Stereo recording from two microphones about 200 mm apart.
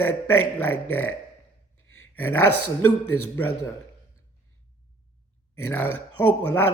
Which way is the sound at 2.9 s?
90° left.